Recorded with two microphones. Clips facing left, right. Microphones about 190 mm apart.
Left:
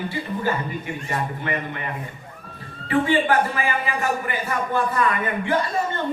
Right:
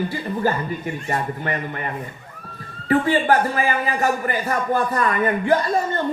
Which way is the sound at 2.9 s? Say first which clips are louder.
Right 2 dB; 40° right (ahead or behind).